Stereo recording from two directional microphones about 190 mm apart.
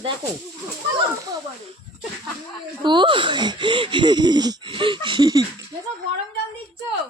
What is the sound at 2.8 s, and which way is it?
A woman's voice, 25° right (ahead or behind).